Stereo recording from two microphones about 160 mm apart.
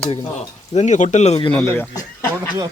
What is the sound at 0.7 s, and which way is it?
Speech, 45° left (ahead or behind).